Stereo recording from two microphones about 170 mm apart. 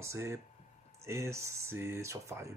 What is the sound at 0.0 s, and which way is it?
Speech, 15° right (ahead or behind).